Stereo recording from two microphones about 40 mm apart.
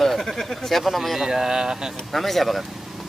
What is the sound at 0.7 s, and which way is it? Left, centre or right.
Speech, centre.